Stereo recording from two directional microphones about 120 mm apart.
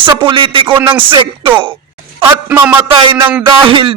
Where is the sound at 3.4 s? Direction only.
45° right (ahead or behind).